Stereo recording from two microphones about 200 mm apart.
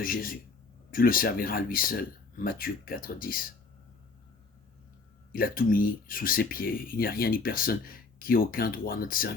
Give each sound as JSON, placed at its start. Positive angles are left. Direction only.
{"t": 0.0, "sound": "speech", "side_deg": 45}
{"t": 5.3, "sound": "speech", "side_deg": 45}